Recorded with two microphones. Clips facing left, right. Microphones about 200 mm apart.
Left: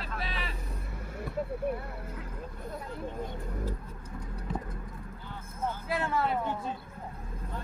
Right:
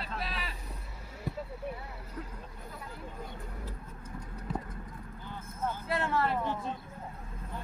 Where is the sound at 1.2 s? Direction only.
55° left (ahead or behind).